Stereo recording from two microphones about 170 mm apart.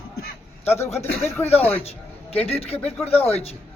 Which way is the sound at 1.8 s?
35° left (ahead or behind).